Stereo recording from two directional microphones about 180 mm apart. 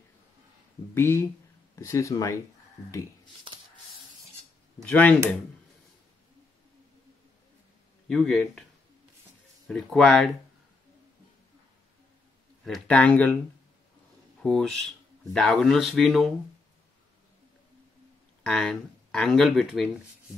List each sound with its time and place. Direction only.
0.9 s speech: 15° left (ahead or behind)
3.5 s a sound: 30° right (ahead or behind)
4.8 s speech: 10° left (ahead or behind)
8.1 s speech: centre (ahead or behind)
9.7 s speech: centre (ahead or behind)
12.6 s speech: 5° left (ahead or behind)
14.4 s speech: 5° left (ahead or behind)
18.4 s speech: 5° left (ahead or behind)